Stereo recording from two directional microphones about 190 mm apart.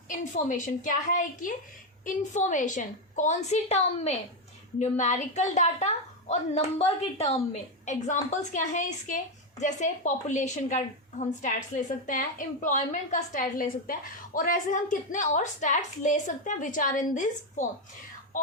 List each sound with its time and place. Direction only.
0.1 s a woman's voice: 40° left (ahead or behind)